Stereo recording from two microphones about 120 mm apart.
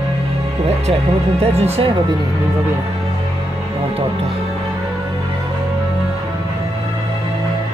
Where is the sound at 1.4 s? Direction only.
60° right (ahead or behind).